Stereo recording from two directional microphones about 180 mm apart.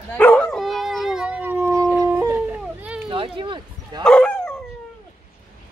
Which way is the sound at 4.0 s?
5° left (ahead or behind).